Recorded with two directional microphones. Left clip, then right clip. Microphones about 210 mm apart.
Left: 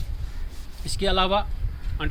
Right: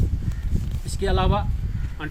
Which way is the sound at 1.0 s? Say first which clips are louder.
Left 2 dB; 15° left (ahead or behind).